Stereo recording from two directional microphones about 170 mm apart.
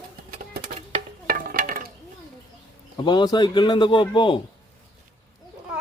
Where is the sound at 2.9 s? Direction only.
25° left (ahead or behind).